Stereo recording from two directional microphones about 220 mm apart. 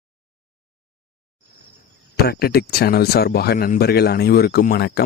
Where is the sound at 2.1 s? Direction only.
45° left (ahead or behind).